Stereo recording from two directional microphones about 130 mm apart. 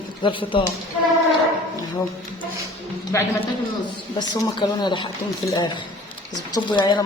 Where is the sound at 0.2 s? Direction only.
40° left (ahead or behind).